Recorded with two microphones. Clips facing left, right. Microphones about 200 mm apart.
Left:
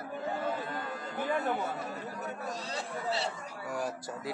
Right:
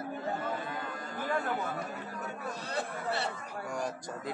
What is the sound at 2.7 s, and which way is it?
Speech, 55° right (ahead or behind).